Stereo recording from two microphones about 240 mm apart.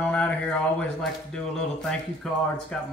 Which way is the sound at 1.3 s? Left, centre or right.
Centre.